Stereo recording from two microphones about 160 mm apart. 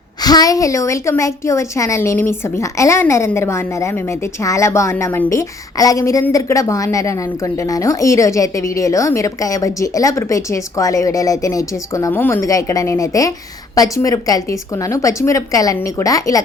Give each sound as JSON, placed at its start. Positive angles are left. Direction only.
{"t": 0.2, "sound": "a woman's voice", "side_deg": 25}